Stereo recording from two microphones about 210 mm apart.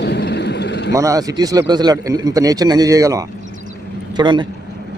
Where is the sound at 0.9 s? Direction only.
15° right (ahead or behind).